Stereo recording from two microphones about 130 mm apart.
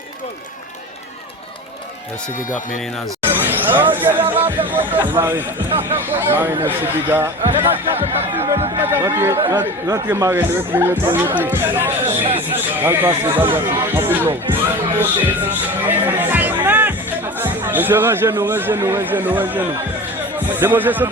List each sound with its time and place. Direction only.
3.2 s a sound: 15° right (ahead or behind)
4.3 s speech: 15° right (ahead or behind)
12.0 s a sound: 45° right (ahead or behind)
12.8 s speech: 15° right (ahead or behind)
15.9 s music: 15° right (ahead or behind)
17.4 s speech: 15° right (ahead or behind)